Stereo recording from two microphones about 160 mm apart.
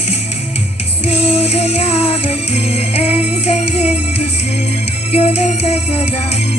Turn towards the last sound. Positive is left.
turn(degrees=40)  # may be behind; listen again after turning